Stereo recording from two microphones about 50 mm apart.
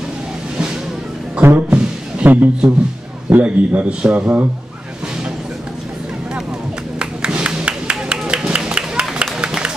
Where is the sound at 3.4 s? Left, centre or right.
Right.